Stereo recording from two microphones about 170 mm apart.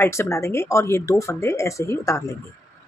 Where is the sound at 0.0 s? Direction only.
15° left (ahead or behind).